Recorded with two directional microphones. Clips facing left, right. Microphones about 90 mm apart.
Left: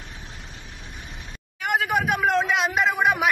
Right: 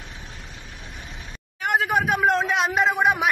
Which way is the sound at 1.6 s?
35° right (ahead or behind).